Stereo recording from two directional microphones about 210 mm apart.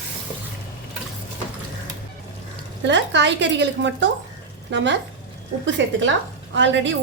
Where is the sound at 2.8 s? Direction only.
55° right (ahead or behind).